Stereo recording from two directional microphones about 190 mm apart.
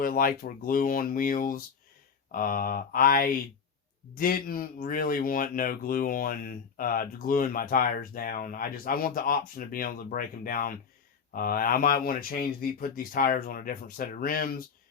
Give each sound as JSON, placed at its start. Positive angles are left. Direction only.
{"t": 0.0, "sound": "speech", "side_deg": 50}